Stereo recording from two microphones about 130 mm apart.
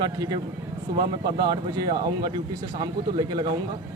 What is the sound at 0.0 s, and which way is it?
A man's voice, 35° right (ahead or behind).